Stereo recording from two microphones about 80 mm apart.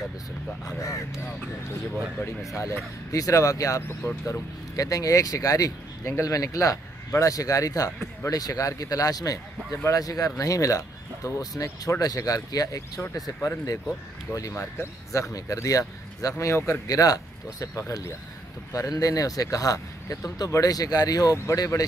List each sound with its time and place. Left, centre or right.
0.7 s speech: left
2.2 s speech: left
14.5 s speech: left
15.3 s speech: left